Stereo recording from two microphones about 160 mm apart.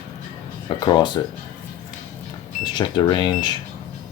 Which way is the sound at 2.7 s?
25° left (ahead or behind).